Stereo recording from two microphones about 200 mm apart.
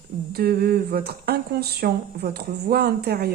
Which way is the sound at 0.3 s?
50° right (ahead or behind).